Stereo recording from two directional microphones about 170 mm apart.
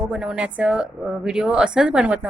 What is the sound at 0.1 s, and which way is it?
A woman's voice, 5° right (ahead or behind).